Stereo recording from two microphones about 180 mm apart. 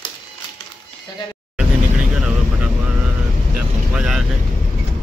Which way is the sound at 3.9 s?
5° right (ahead or behind).